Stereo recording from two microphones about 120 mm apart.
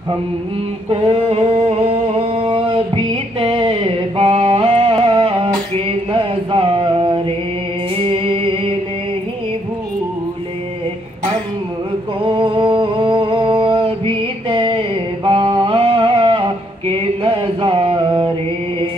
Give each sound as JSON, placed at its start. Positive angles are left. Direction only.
{"t": 1.0, "sound": "a sound", "side_deg": -50}
{"t": 4.4, "sound": "music", "side_deg": -50}
{"t": 12.3, "sound": "music", "side_deg": -50}